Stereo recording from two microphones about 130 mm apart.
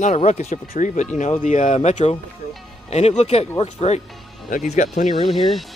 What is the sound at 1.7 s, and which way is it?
Speech, 60° left (ahead or behind).